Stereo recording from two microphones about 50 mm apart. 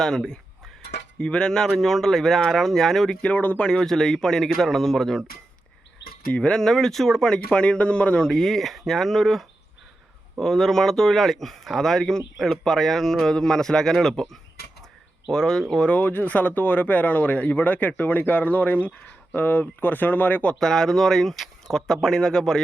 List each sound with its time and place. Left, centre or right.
0.0 s speech: centre
1.2 s speech: centre
3.2 s speech: left
3.6 s speech: centre
6.5 s speech: centre
8.3 s speech: centre
15.3 s speech: centre
15.9 s speech: left
20.6 s speech: centre